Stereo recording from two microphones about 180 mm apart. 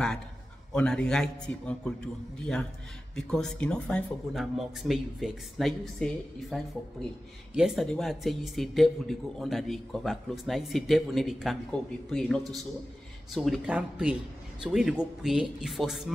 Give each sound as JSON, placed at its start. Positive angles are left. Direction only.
{"t": 0.7, "sound": "speech", "side_deg": 5}
{"t": 3.2, "sound": "speech", "side_deg": 5}